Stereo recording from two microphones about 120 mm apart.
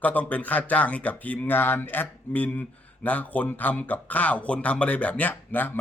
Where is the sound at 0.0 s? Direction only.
15° left (ahead or behind).